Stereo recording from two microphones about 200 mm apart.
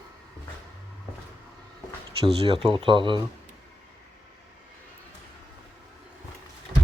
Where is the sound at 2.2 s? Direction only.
30° right (ahead or behind).